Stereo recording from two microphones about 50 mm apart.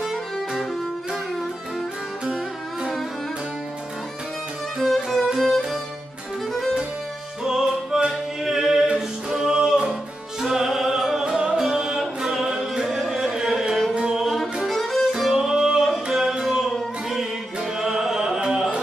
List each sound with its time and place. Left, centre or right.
4.7 s music: centre
7.4 s music: centre
10.4 s opera: centre
11.3 s music: centre
14.2 s music: centre
15.1 s music: centre
17.7 s music: centre